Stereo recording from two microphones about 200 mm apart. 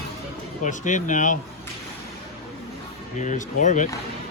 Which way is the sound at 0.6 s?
40° left (ahead or behind).